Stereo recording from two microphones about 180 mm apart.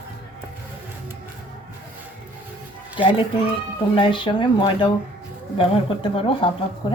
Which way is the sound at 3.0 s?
30° left (ahead or behind).